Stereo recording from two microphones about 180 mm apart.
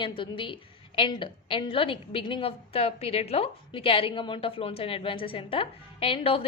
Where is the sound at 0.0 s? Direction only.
30° left (ahead or behind).